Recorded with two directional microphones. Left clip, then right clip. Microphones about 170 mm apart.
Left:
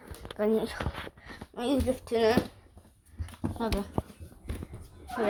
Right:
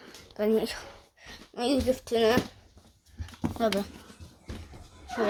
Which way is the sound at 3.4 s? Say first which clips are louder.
Right 5 dB; 60° right (ahead or behind).